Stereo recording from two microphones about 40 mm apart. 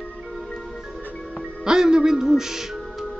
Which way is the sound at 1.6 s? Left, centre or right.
Centre.